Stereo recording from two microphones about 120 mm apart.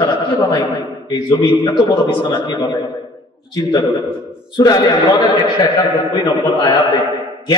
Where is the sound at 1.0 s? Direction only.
35° left (ahead or behind).